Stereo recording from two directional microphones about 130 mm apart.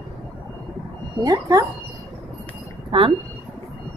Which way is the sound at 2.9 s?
40° right (ahead or behind).